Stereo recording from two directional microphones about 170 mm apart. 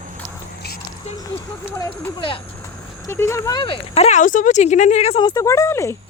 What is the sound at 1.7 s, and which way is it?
Speech, 20° left (ahead or behind).